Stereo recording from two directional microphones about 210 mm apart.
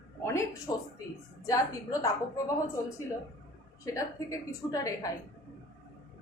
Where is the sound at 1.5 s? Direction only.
15° left (ahead or behind).